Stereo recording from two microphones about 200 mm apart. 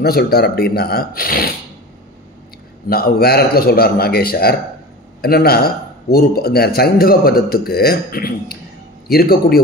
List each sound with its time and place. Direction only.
0.0 s a man's voice: 50° left (ahead or behind)
2.9 s a man's voice: 50° left (ahead or behind)